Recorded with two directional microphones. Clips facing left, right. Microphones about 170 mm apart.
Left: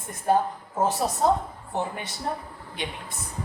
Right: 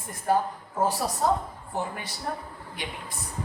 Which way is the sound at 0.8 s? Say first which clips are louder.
Left 2 dB; 20° left (ahead or behind).